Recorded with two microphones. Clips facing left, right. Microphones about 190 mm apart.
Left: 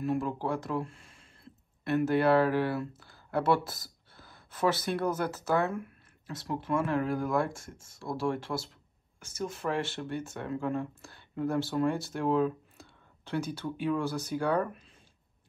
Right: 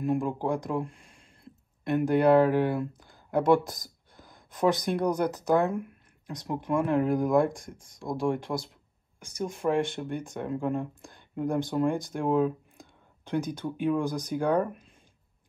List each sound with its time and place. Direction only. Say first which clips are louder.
0.0 s speech: right 3 dB; 15° right (ahead or behind)